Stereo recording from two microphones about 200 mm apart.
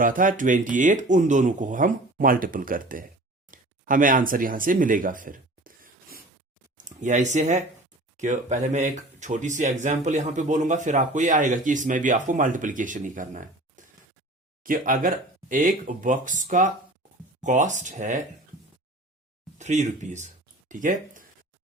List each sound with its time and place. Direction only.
0.0 s speech: 40° right (ahead or behind)
3.5 s a sound: 45° right (ahead or behind)
6.7 s speech: 40° right (ahead or behind)
19.5 s speech: 35° right (ahead or behind)